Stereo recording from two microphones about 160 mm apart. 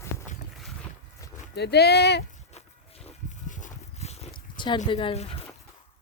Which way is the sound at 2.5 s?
40° left (ahead or behind).